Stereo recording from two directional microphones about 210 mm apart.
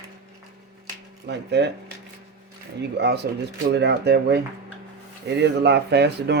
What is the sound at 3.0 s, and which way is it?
Speech, 50° right (ahead or behind).